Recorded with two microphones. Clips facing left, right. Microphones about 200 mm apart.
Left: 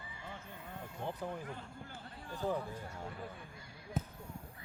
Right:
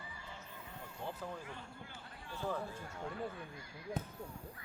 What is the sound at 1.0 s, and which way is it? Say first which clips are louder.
Speech: left 3 dB; 15° left (ahead or behind).